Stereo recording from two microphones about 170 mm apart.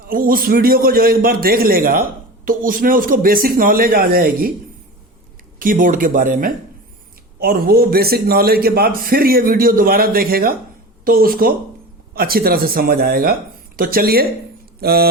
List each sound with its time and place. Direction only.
0.1 s a man's voice: 55° right (ahead or behind)
5.5 s a man's voice: 55° right (ahead or behind)